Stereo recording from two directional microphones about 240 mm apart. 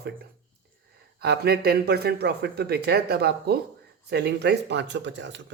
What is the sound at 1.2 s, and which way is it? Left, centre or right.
Speech, right.